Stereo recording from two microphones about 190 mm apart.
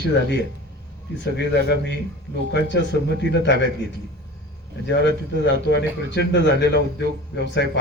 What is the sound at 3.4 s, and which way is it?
Speech, 70° left (ahead or behind).